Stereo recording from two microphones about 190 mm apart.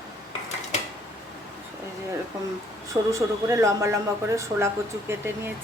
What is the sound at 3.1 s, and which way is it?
A woman's voice, 15° right (ahead or behind).